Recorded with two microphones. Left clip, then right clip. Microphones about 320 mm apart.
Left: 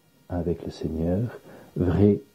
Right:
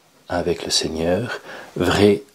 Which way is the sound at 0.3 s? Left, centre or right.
Centre.